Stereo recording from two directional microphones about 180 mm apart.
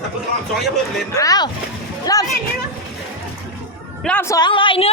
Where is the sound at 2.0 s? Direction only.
20° left (ahead or behind).